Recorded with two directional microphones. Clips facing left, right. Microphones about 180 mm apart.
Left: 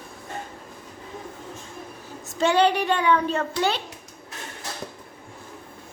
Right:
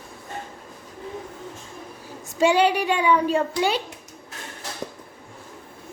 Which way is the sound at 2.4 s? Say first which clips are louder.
Right 1 dB; 10° right (ahead or behind).